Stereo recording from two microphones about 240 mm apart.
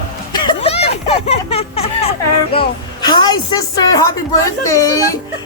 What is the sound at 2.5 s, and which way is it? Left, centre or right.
Speech, centre.